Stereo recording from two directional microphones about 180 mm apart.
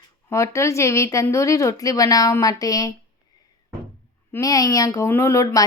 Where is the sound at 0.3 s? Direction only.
15° left (ahead or behind).